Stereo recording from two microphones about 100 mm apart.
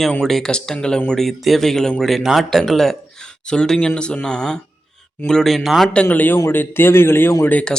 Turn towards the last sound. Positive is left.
turn(degrees=15)  # may be behind; listen again after turning